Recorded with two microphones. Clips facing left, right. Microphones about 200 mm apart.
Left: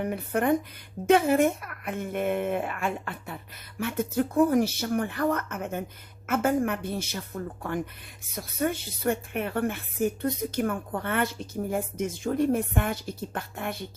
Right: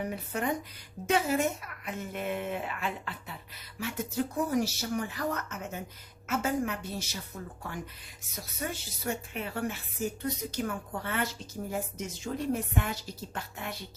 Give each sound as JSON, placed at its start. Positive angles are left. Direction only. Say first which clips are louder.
{"t": 0.0, "sound": "speech", "louder": "left 6 dB", "side_deg": 55}